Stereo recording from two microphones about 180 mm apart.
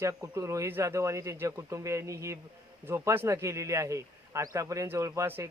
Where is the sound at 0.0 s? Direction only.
15° right (ahead or behind).